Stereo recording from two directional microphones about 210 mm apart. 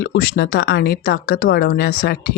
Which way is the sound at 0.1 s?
50° left (ahead or behind).